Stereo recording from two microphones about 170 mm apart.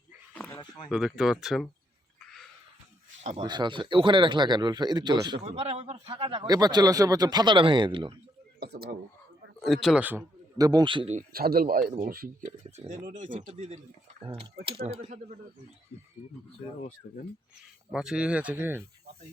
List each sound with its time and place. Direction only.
0.3 s a sound: 10° left (ahead or behind)
0.6 s speech: 25° left (ahead or behind)
0.9 s speech: 5° right (ahead or behind)
3.4 s speech: 25° right (ahead or behind)
5.5 s speech: 40° right (ahead or behind)
8.6 s speech: 70° right (ahead or behind)
9.6 s a man's voice: centre (ahead or behind); by 11.1 s 30° right (ahead or behind)
11.1 s speech: 55° right (ahead or behind)
12.5 s speech: 40° right (ahead or behind)
13.0 s speech: 55° right (ahead or behind)
14.8 s speech: 35° right (ahead or behind)
17.9 s speech: 5° right (ahead or behind)